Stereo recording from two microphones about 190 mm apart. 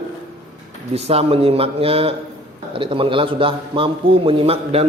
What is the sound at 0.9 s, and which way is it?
A man's voice, 30° right (ahead or behind).